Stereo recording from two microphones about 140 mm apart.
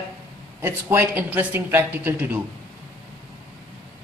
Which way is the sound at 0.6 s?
15° right (ahead or behind).